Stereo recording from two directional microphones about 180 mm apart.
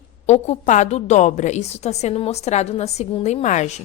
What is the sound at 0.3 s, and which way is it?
A woman's voice, 40° left (ahead or behind).